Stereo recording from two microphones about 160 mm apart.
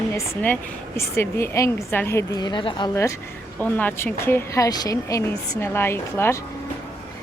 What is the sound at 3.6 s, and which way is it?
A woman's voice, 10° left (ahead or behind).